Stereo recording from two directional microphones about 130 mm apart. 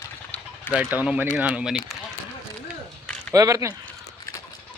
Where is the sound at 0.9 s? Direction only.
15° right (ahead or behind).